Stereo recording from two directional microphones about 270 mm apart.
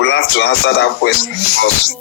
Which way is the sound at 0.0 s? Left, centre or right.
Left.